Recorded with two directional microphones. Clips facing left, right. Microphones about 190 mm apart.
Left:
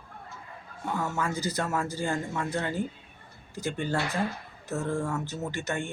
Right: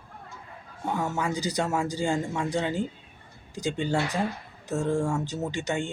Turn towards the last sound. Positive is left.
turn(degrees=-15)  # may be behind; listen again after turning